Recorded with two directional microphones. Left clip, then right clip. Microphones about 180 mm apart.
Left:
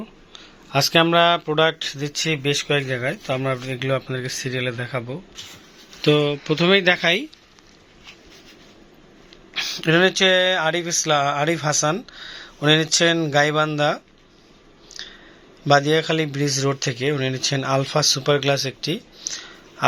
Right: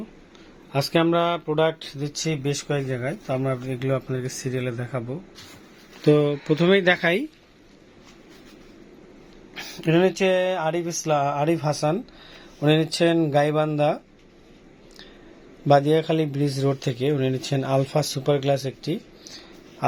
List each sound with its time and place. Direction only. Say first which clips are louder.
0.3 s speech: left 5 dB; 5° left (ahead or behind); by 7.3 s 20° right (ahead or behind)
9.6 s speech: left 4 dB; 10° right (ahead or behind)
11.5 s speech: left 3 dB; centre (ahead or behind)
11.8 s speech: left 3 dB; 15° right (ahead or behind)
15.0 s a sound: left 11 dB; 20° right (ahead or behind)
15.6 s speech: left 1 dB; 20° right (ahead or behind)
19.3 s a sound: left 11 dB; 10° right (ahead or behind)